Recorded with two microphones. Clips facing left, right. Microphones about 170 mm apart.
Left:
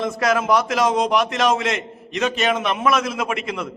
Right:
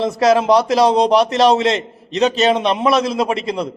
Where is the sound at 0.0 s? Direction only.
35° right (ahead or behind).